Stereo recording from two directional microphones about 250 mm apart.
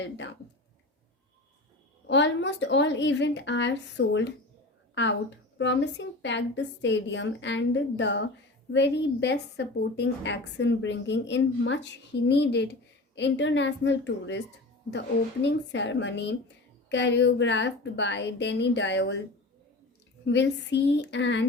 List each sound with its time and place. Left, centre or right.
0.0 s a woman's voice: left
2.0 s a woman's voice: left
5.5 s a woman's voice: left
20.2 s a woman's voice: left